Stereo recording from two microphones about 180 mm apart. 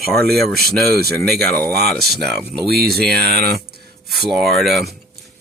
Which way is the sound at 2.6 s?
60° right (ahead or behind).